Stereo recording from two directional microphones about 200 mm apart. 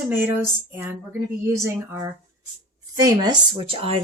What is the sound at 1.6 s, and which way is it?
A woman's voice, 15° right (ahead or behind).